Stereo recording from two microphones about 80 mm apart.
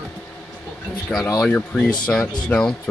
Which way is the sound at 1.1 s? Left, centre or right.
Centre.